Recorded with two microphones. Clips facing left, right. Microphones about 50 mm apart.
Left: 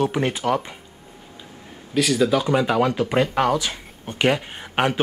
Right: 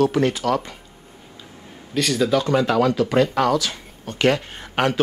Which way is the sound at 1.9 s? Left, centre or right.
Centre.